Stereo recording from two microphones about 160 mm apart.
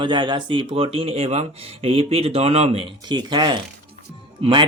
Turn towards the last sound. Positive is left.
turn(degrees=-30)  # may be behind; listen again after turning